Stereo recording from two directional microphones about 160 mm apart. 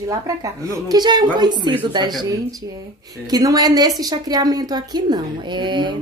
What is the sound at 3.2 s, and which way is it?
A woman's voice, 25° right (ahead or behind).